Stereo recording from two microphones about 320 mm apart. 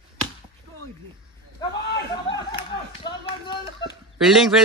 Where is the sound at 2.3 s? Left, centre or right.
Centre.